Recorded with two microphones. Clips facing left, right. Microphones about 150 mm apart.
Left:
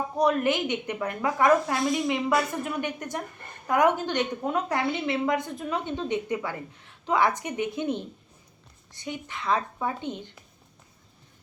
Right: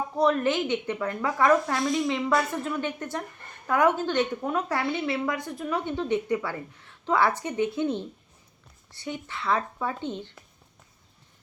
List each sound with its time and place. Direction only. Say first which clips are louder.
0.2 s a woman's voice: even; 15° left (ahead or behind)